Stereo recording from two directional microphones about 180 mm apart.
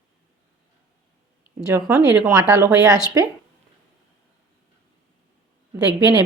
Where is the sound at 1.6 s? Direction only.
15° right (ahead or behind).